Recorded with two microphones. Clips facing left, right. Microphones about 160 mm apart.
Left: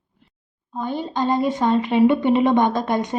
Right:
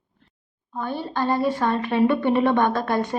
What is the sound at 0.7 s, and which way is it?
A woman's voice, 15° left (ahead or behind).